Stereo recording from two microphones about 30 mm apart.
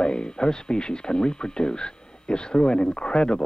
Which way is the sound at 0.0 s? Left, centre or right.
Left.